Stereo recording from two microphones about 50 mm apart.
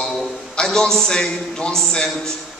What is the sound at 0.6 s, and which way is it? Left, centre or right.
A man's voice, centre.